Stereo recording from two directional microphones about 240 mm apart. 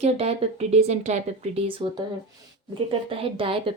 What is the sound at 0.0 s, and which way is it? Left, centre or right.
Speech, right.